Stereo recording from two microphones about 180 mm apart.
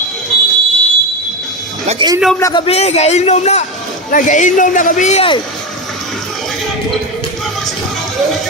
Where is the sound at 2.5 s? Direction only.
35° left (ahead or behind).